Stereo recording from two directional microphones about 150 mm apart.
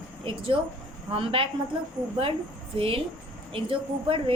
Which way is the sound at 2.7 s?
40° right (ahead or behind).